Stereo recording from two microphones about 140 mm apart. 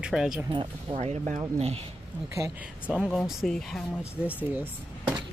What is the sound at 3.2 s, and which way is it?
Speech, centre (ahead or behind).